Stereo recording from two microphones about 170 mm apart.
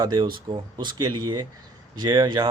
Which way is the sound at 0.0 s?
25° right (ahead or behind).